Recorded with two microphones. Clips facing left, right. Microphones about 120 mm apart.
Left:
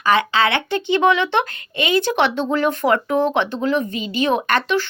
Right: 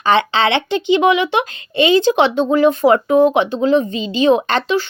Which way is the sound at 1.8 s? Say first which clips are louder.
Right 6 dB; 25° right (ahead or behind).